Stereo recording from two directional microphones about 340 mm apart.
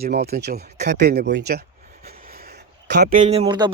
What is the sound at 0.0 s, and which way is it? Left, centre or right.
Speech, right.